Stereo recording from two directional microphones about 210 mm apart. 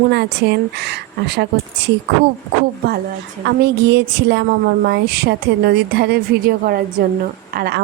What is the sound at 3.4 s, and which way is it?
A woman's voice, 50° right (ahead or behind).